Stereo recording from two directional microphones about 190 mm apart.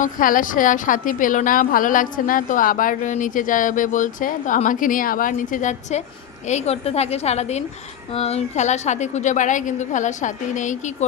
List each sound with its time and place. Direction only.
0.0 s a woman's voice: 45° left (ahead or behind)